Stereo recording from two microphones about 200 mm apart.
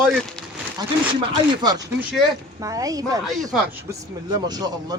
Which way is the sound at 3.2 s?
Centre (ahead or behind).